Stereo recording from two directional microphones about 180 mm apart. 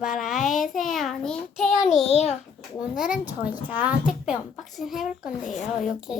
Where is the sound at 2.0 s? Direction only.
35° left (ahead or behind).